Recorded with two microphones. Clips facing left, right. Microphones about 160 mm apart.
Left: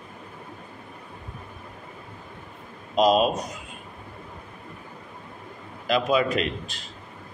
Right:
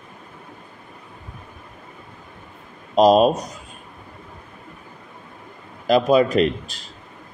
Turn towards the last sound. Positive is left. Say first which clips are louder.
# right 8 dB
turn(degrees=-40)  # may be behind; listen again after turning